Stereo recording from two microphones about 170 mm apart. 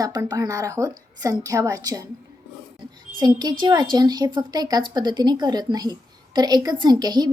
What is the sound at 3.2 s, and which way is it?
A woman's voice, 25° right (ahead or behind).